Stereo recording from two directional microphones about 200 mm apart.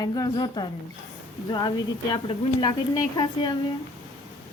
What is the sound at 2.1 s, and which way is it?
Speech, 25° left (ahead or behind).